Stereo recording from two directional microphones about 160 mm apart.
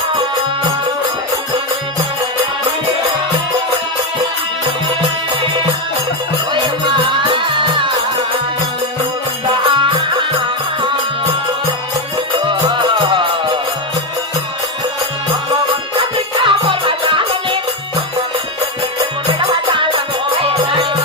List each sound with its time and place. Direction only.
7.5 s music: 30° right (ahead or behind)
9.5 s music: 30° right (ahead or behind)
12.5 s music: 30° right (ahead or behind)
16.0 s music: 30° right (ahead or behind)
19.3 s music: 30° right (ahead or behind)